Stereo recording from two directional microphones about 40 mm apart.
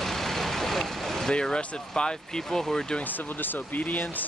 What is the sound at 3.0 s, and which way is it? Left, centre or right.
Speech, left.